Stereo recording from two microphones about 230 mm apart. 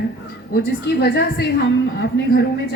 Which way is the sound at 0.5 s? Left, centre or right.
Left.